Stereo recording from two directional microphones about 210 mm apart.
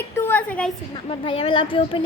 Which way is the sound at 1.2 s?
25° left (ahead or behind).